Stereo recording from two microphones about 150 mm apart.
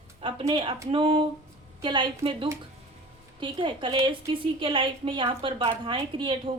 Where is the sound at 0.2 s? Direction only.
35° right (ahead or behind).